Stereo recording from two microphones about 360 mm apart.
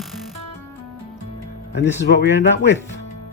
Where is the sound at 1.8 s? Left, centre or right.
Left.